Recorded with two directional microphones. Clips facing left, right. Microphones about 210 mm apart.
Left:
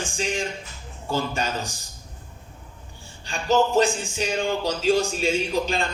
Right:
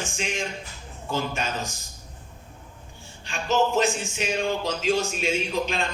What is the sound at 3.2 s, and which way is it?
Speech, 35° left (ahead or behind).